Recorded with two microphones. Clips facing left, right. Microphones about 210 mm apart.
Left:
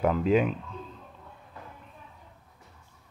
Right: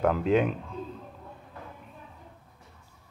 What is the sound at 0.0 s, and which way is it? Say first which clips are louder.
Speech: even; centre (ahead or behind).